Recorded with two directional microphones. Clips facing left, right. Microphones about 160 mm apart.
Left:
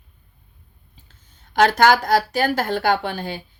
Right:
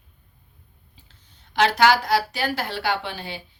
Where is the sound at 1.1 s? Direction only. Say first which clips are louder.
Left 2 dB; 45° left (ahead or behind).